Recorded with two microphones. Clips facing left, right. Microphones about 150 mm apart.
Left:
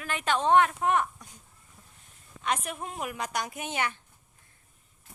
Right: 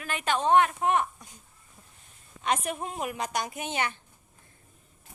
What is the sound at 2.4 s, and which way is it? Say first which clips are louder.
A woman's voice: right 3 dB; 25° right (ahead or behind).